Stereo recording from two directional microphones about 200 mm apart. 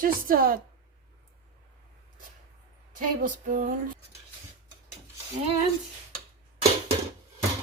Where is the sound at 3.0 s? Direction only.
40° right (ahead or behind).